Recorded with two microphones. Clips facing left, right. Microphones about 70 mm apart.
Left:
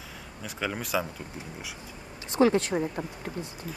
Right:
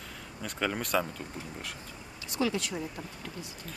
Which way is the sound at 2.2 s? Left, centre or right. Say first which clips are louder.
Left 8 dB; left.